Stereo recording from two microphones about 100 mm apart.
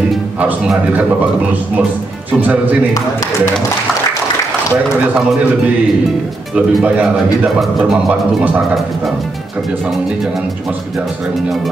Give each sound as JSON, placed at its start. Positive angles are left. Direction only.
{"t": 2.4, "sound": "speech", "side_deg": -15}
{"t": 6.5, "sound": "speech", "side_deg": -10}